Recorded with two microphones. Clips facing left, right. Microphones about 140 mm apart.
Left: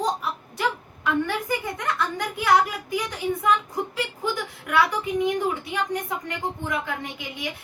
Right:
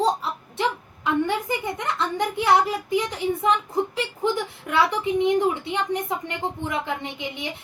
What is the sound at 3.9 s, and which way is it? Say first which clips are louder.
A woman's voice: right 3 dB; 25° right (ahead or behind).